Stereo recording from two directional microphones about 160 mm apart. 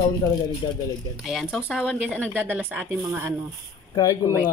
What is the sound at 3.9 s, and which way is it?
Speech, 20° left (ahead or behind).